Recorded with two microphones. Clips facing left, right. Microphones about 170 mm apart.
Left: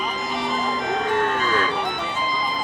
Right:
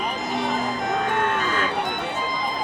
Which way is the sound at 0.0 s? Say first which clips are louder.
Right 1 dB; 60° right (ahead or behind).